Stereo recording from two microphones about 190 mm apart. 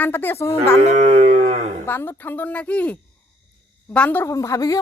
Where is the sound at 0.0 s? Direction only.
10° left (ahead or behind).